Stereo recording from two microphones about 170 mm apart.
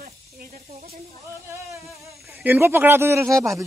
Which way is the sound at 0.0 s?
50° right (ahead or behind).